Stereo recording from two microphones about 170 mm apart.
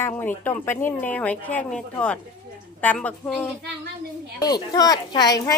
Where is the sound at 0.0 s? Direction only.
10° left (ahead or behind).